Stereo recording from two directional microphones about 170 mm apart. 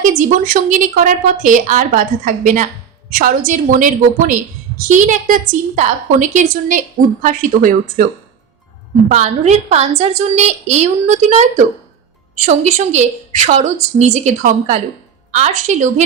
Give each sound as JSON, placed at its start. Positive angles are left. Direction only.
{"t": 0.0, "sound": "a woman's voice", "side_deg": -50}
{"t": 9.0, "sound": "a woman's voice", "side_deg": -45}